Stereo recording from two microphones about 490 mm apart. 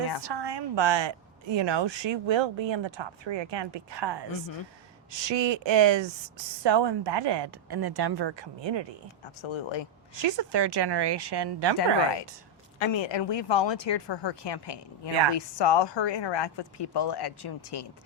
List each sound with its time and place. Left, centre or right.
0.2 s a woman's voice: right
9.4 s speech: left
10.2 s speech: right
12.8 s speech: left